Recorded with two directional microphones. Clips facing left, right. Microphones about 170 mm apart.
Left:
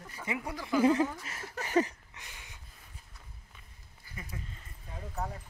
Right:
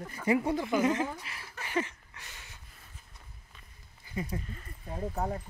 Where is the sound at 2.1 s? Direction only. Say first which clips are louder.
Even; 15° left (ahead or behind).